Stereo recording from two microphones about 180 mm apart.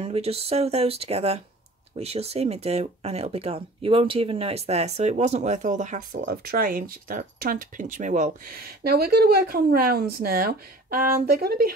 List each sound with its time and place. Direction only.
0.0 s speech: 35° right (ahead or behind)
8.5 s speech: 60° right (ahead or behind)